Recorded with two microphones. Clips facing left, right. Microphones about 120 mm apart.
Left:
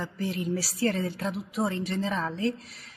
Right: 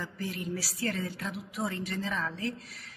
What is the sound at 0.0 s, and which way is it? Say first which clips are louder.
A woman's voice: left 5 dB; 25° left (ahead or behind).